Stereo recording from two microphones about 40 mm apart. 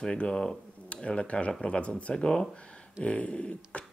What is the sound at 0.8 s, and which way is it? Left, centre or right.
Speech, left.